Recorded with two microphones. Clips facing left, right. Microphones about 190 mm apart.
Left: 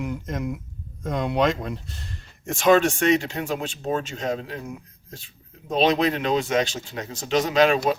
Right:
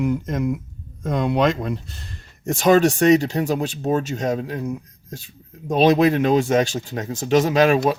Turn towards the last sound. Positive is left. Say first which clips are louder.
# right 3 dB
turn(degrees=-45)  # may be behind; listen again after turning